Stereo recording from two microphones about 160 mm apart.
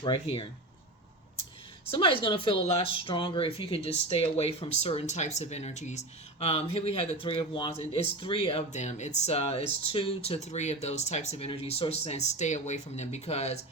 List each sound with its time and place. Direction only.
0.0 s speech: 35° left (ahead or behind)
1.9 s speech: 35° left (ahead or behind)
8.7 s speech: 45° left (ahead or behind)